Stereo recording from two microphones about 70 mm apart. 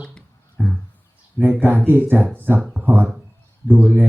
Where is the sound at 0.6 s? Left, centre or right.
Right.